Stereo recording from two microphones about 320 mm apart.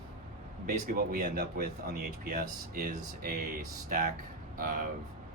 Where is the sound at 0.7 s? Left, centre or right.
Right.